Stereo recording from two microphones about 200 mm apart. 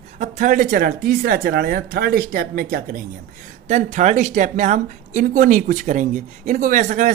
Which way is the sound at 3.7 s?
35° right (ahead or behind).